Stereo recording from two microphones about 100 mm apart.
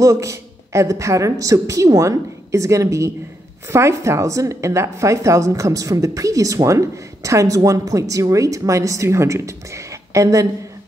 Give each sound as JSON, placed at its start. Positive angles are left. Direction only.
{"t": 0.0, "sound": "speech", "side_deg": -30}